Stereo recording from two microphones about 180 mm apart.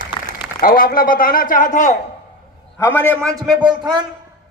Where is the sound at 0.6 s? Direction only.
50° left (ahead or behind).